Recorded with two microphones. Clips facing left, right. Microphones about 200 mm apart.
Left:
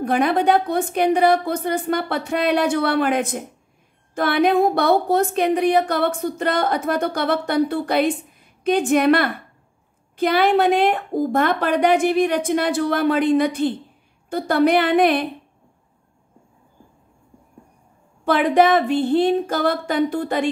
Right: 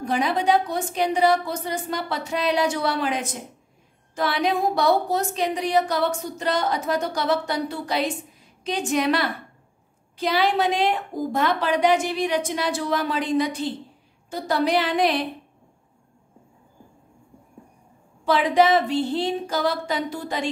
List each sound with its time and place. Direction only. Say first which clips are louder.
0.0 s a woman's voice: left 5 dB; 55° left (ahead or behind)
18.2 s a woman's voice: left 3 dB; 55° left (ahead or behind)